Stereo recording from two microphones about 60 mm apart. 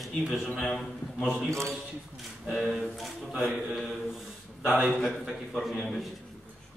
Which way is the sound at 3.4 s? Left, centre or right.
Centre.